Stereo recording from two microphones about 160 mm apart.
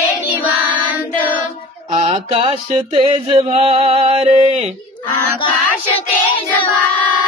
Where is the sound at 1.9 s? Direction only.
35° right (ahead or behind).